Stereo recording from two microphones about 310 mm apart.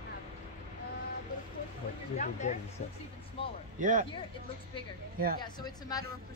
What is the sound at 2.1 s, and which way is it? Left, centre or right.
Speech, left.